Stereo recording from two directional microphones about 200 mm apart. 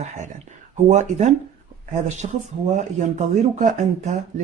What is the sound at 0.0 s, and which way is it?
Speech, 35° right (ahead or behind).